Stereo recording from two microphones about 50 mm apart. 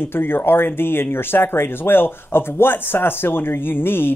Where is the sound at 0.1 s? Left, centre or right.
Left.